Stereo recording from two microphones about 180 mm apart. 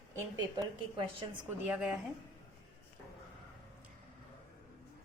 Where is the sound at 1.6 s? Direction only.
10° right (ahead or behind).